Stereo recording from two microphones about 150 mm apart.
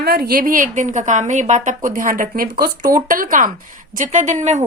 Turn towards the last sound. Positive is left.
turn(degrees=-50)  # may be behind; listen again after turning